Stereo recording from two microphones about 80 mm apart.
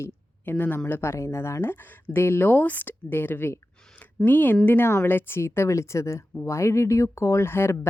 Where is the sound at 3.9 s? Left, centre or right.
Left.